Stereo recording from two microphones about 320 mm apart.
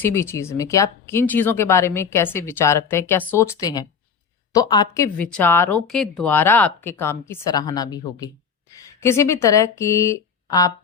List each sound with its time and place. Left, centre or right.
0.0 s speech: centre